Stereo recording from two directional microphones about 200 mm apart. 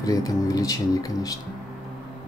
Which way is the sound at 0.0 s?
15° left (ahead or behind).